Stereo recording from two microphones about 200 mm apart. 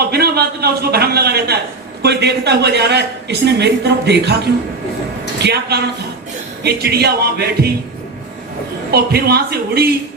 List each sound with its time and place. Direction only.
0.1 s a man's voice: 50° right (ahead or behind)
5.4 s a woman's voice: 55° right (ahead or behind)
8.9 s speech: 50° right (ahead or behind)